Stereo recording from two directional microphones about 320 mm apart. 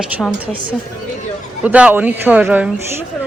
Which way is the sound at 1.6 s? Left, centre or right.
Centre.